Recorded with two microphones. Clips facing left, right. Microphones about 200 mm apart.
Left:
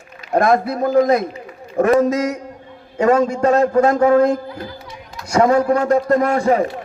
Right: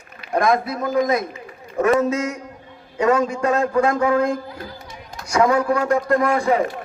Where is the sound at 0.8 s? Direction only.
30° left (ahead or behind).